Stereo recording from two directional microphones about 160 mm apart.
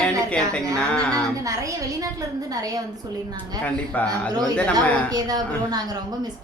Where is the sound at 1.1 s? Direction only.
20° right (ahead or behind).